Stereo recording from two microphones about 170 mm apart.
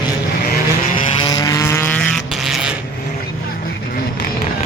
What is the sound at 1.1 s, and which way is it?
Vehicle, 20° left (ahead or behind).